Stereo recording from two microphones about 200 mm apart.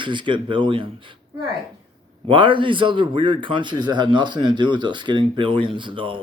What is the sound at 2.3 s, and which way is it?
A man's voice, 25° right (ahead or behind).